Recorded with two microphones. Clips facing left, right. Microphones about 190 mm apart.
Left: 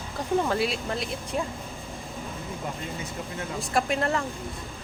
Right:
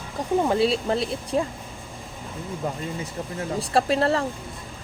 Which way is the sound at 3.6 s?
35° right (ahead or behind).